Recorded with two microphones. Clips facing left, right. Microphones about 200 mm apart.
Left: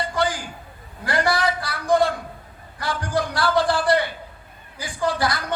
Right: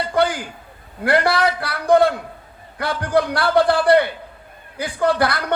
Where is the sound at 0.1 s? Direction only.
55° right (ahead or behind).